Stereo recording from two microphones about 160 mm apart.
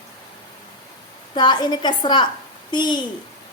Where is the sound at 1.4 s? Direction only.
25° left (ahead or behind).